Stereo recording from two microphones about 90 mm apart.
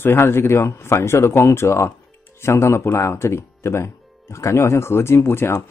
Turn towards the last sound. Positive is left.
turn(degrees=30)  # may be behind; listen again after turning